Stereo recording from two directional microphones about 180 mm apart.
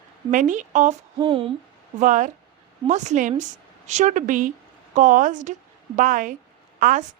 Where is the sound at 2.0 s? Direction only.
45° right (ahead or behind).